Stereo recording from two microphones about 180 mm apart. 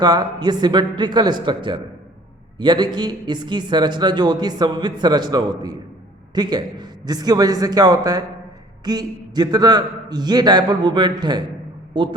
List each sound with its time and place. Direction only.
0.0 s a man's voice: 20° right (ahead or behind)